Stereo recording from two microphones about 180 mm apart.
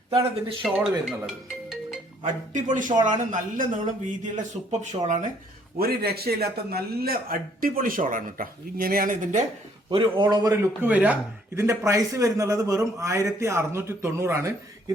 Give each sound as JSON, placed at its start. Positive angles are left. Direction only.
{"t": 0.1, "sound": "a man's voice", "side_deg": -20}
{"t": 0.6, "sound": "speech", "side_deg": 0}
{"t": 2.2, "sound": "a man's voice", "side_deg": -45}
{"t": 4.6, "sound": "speech", "side_deg": 0}
{"t": 5.0, "sound": "speech", "side_deg": -40}
{"t": 5.8, "sound": "a man's voice", "side_deg": -60}
{"t": 9.9, "sound": "a man's voice", "side_deg": -30}
{"t": 10.5, "sound": "speech", "side_deg": -10}